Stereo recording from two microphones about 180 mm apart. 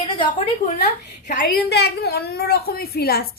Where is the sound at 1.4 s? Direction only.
65° left (ahead or behind).